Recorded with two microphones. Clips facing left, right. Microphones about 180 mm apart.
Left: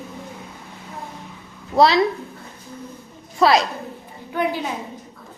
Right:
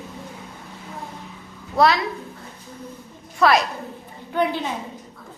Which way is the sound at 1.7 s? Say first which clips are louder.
Left 2 dB; 30° left (ahead or behind).